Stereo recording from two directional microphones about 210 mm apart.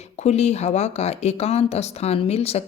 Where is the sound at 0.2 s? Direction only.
30° left (ahead or behind).